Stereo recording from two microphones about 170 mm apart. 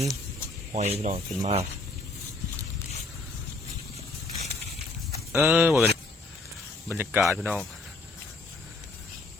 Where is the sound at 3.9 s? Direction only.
40° left (ahead or behind).